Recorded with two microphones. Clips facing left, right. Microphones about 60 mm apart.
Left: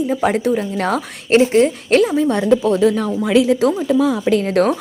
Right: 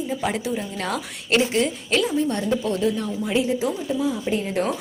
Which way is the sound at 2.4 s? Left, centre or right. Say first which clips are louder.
Left 8 dB; left.